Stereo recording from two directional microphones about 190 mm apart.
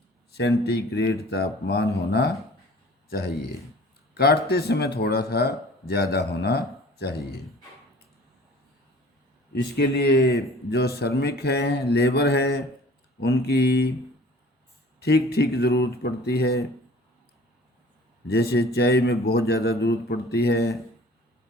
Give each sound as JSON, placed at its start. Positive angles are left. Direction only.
{"t": 0.3, "sound": "a sound", "side_deg": 60}
{"t": 0.6, "sound": "a man's voice", "side_deg": 60}
{"t": 9.6, "sound": "speech", "side_deg": 55}
{"t": 14.9, "sound": "a sound", "side_deg": 60}
{"t": 15.3, "sound": "speech", "side_deg": 60}
{"t": 18.3, "sound": "speech", "side_deg": 60}